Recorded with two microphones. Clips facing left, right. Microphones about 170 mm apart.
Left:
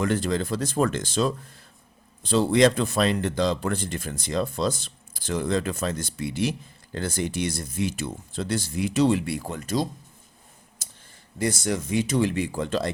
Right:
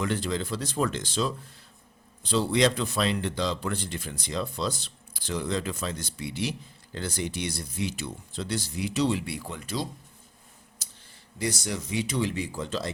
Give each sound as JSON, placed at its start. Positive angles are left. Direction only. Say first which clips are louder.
{"t": 0.0, "sound": "speech", "louder": "left 4 dB", "side_deg": 50}
{"t": 10.8, "sound": "a sound", "louder": "left 5 dB", "side_deg": 50}
{"t": 11.3, "sound": "speech", "louder": "left 5 dB", "side_deg": 50}